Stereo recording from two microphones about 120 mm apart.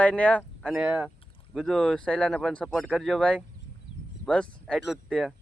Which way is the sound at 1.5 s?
Centre (ahead or behind).